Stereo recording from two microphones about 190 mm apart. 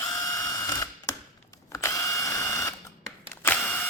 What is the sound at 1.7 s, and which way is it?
Drill, 15° left (ahead or behind).